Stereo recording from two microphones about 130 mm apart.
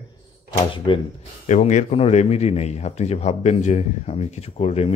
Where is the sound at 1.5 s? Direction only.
65° left (ahead or behind).